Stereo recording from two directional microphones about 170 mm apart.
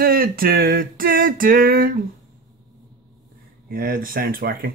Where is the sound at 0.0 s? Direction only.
60° right (ahead or behind).